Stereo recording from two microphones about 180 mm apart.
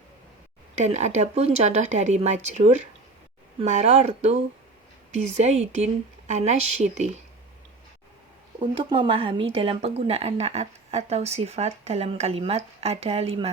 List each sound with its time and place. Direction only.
0.8 s a woman's voice: 40° right (ahead or behind)
8.7 s a woman's voice: 25° right (ahead or behind)